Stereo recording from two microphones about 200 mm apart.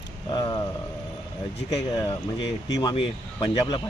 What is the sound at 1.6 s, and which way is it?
Speech, 15° left (ahead or behind).